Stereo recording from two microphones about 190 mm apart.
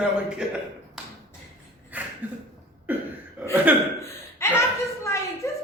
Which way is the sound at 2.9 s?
10° right (ahead or behind).